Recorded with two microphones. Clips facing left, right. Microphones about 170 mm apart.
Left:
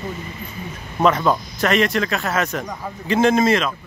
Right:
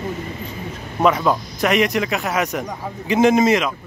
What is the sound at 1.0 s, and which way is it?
Speech, 10° right (ahead or behind).